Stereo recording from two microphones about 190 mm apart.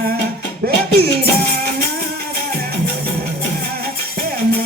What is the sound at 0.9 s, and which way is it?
Music, 55° right (ahead or behind).